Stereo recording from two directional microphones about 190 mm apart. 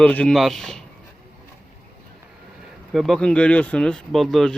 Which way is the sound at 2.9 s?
Centre (ahead or behind).